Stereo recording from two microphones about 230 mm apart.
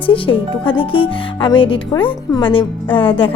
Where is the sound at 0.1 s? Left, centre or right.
Left.